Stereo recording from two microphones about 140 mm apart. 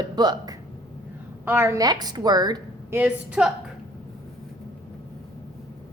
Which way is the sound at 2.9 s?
10° right (ahead or behind).